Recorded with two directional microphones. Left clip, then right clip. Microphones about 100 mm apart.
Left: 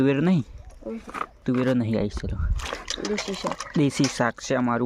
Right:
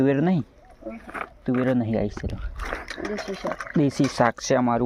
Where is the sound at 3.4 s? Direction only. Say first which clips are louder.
Right 1 dB; 40° left (ahead or behind).